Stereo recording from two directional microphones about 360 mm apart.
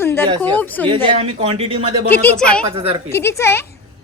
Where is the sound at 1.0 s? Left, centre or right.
Centre.